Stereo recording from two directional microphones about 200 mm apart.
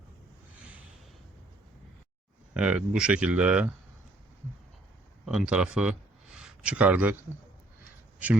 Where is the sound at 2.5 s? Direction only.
5° right (ahead or behind).